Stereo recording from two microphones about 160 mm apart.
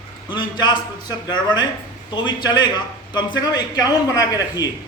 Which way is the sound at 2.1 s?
30° left (ahead or behind).